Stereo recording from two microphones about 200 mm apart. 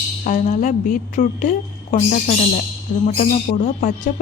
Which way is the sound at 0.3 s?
40° left (ahead or behind).